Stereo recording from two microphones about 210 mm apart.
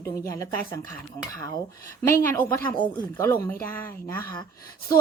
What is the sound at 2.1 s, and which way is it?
Speech, 15° left (ahead or behind).